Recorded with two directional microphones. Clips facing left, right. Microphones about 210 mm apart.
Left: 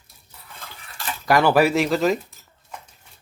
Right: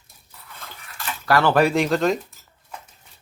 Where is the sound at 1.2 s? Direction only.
15° left (ahead or behind).